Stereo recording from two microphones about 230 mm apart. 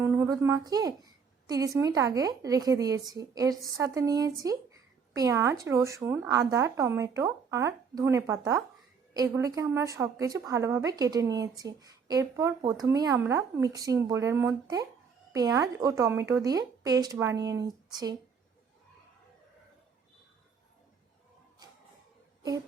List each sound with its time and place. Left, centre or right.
0.0 s a woman's voice: centre